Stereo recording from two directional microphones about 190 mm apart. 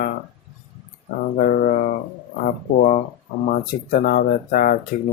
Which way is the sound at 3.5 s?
50° left (ahead or behind).